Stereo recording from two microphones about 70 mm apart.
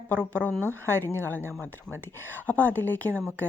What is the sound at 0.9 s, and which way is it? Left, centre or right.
Speech, left.